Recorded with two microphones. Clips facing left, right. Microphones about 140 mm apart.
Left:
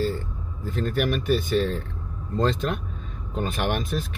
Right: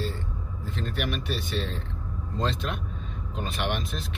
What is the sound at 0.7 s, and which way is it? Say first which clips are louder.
Speech: left 7 dB; 45° left (ahead or behind).